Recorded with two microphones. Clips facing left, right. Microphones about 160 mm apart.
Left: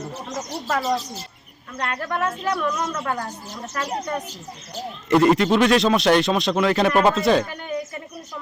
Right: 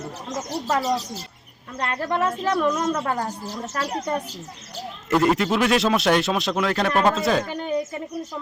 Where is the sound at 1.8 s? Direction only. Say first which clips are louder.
Right 2 dB; 25° right (ahead or behind).